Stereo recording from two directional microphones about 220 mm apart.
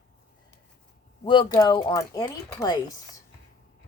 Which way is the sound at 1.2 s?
20° left (ahead or behind).